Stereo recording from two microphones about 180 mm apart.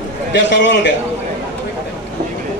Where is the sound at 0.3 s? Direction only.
75° left (ahead or behind).